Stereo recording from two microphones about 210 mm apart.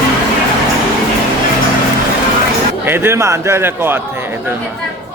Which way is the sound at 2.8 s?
10° right (ahead or behind).